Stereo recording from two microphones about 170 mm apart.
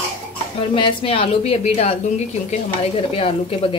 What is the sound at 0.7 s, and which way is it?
A woman's voice, 30° left (ahead or behind).